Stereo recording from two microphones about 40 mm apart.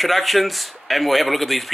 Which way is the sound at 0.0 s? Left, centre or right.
Centre.